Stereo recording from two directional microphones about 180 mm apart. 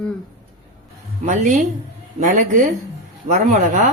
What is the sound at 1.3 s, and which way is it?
Speech, 45° right (ahead or behind).